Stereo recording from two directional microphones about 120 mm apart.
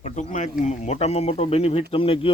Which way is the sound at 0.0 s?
85° left.